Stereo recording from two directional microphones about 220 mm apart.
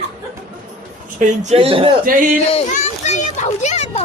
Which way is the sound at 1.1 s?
30° right (ahead or behind).